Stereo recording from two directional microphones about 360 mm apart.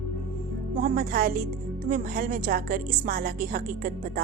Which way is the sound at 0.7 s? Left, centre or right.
Right.